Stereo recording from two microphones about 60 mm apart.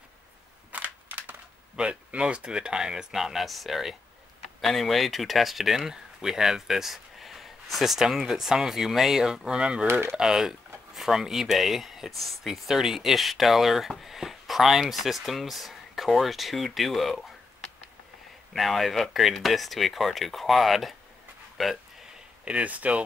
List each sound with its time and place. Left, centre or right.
0.7 s a sound: right
1.8 s speech: centre
9.8 s speech: right
10.1 s speech: centre
18.5 s speech: centre
22.4 s speech: right